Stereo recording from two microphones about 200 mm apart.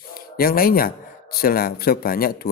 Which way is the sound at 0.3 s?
45° left (ahead or behind).